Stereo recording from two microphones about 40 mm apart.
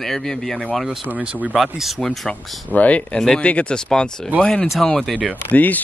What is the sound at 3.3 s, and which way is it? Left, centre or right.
Speech, left.